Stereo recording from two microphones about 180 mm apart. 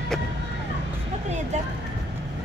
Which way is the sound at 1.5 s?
40° right (ahead or behind).